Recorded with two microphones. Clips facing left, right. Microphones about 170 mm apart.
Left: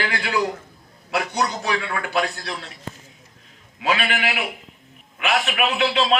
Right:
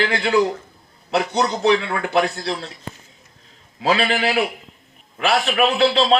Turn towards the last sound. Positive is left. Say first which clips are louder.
# right 4 dB
turn(degrees=-35)  # may be behind; listen again after turning